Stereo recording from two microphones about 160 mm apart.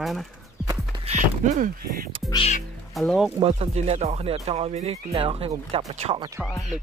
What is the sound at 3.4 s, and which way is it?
Speech, 40° right (ahead or behind).